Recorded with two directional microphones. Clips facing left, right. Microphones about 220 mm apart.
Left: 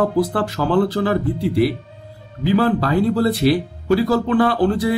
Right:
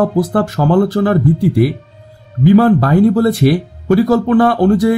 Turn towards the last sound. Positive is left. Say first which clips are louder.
# right 6 dB
turn(degrees=-45)  # may be behind; listen again after turning